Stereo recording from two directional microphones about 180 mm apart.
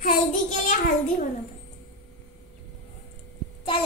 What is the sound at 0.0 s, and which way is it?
Child singing, 45° left (ahead or behind).